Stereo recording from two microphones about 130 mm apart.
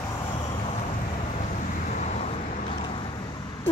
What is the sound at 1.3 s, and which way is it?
Vehicle, 70° left (ahead or behind).